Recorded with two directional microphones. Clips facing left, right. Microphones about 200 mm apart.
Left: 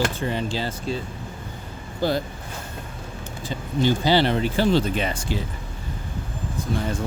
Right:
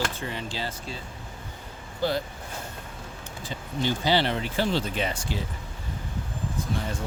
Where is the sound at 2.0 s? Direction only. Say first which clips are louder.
Left 3 dB; 40° left (ahead or behind).